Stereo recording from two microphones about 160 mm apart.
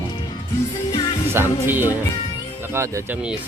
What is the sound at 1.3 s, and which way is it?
Speech, 15° right (ahead or behind).